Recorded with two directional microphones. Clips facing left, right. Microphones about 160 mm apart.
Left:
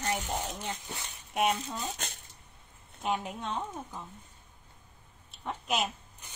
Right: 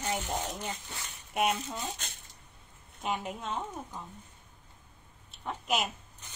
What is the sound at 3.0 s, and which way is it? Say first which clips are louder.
Speech: left 2 dB; centre (ahead or behind).